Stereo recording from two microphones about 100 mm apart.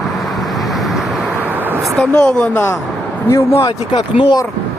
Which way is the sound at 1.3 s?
20° right (ahead or behind).